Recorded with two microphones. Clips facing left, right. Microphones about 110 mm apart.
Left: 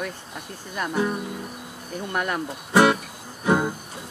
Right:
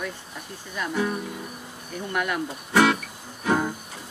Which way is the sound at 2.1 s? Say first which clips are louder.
Even; 40° left (ahead or behind).